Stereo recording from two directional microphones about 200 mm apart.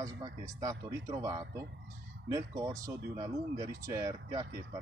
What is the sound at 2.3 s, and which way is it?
Speech, 15° right (ahead or behind).